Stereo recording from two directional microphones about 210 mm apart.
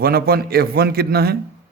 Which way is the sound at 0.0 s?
45° right (ahead or behind).